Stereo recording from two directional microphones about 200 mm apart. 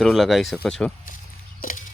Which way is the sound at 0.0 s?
Centre (ahead or behind).